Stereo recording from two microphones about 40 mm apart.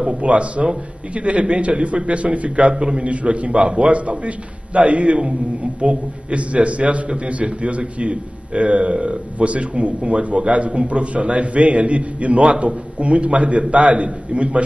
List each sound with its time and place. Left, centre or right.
0.0 s a man's voice: right